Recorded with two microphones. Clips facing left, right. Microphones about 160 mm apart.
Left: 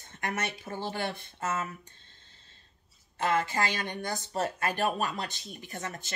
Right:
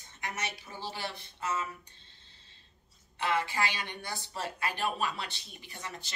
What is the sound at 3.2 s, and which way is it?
Speech, 45° left (ahead or behind).